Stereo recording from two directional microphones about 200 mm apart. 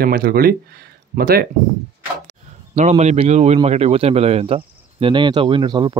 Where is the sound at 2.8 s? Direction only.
35° right (ahead or behind).